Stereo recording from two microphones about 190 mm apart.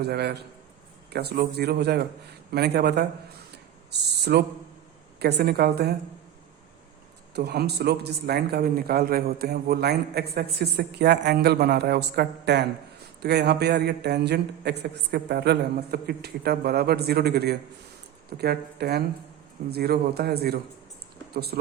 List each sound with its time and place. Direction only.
0.0 s a man's voice: 60° right (ahead or behind)
4.3 s a man's voice: 55° right (ahead or behind)
7.3 s a man's voice: 60° right (ahead or behind)